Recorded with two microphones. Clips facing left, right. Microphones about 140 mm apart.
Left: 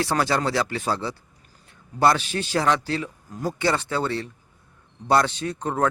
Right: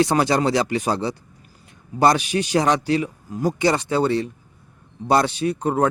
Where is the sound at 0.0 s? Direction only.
20° right (ahead or behind).